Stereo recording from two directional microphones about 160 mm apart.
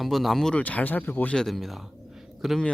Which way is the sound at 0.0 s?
Centre (ahead or behind).